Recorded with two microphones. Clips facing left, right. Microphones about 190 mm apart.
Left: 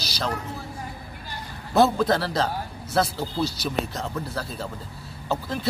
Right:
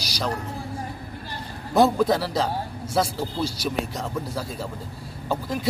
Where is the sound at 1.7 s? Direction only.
15° right (ahead or behind).